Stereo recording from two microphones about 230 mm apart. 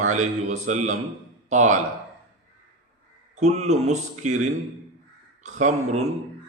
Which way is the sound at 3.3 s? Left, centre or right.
Right.